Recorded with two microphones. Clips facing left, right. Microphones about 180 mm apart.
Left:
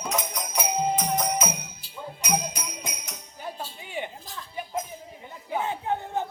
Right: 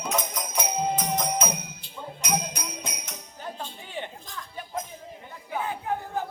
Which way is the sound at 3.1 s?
10° left (ahead or behind).